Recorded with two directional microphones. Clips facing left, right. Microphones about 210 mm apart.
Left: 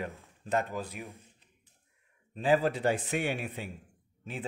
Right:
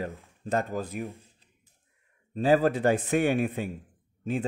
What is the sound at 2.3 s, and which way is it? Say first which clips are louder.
A man's voice: right 4 dB; 40° right (ahead or behind).